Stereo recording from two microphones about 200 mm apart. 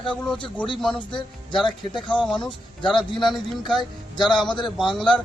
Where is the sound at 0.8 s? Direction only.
Centre (ahead or behind).